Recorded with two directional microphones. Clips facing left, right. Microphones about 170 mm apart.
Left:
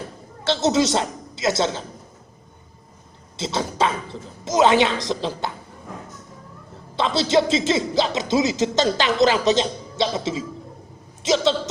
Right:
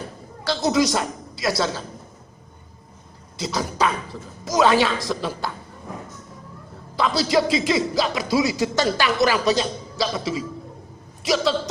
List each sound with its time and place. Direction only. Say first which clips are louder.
0.4 s a woman's voice: left 1 dB; 25° left (ahead or behind)
3.3 s speech: left 1 dB; 25° left (ahead or behind)
6.9 s speech: left 1 dB; 25° left (ahead or behind)